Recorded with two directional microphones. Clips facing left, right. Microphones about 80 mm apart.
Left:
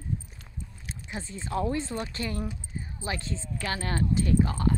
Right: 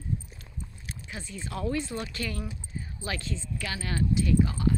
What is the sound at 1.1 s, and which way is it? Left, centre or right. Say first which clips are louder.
Speech: left 5 dB; left.